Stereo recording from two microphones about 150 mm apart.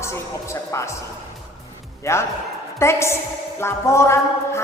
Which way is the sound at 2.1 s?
20° left (ahead or behind).